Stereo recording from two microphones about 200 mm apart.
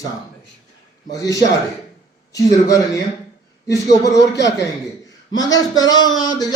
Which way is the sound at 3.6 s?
15° left (ahead or behind).